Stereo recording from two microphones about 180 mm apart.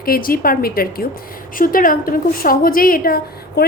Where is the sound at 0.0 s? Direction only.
55° left (ahead or behind).